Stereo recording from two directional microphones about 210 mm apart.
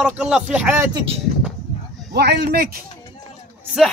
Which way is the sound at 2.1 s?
50° right (ahead or behind).